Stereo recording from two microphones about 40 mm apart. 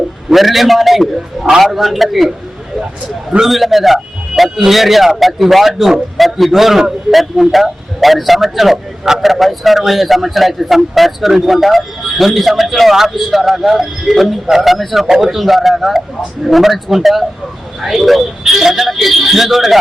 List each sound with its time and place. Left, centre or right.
0.3 s a man's voice: centre
3.4 s a man's voice: centre